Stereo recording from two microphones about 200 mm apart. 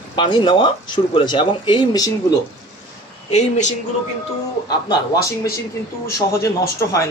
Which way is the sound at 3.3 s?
35° left (ahead or behind).